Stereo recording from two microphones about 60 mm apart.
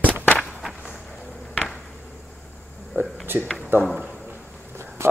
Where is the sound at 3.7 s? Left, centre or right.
Right.